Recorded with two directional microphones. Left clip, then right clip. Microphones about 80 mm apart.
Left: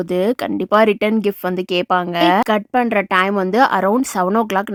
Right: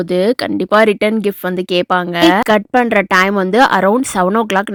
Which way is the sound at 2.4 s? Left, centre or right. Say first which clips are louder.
Right 5 dB; right.